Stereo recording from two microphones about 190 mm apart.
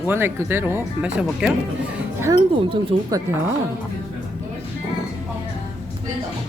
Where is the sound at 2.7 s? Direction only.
20° right (ahead or behind).